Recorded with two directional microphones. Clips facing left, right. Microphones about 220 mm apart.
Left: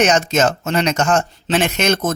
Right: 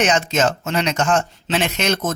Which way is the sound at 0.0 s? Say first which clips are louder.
Left 3 dB; 45° left (ahead or behind).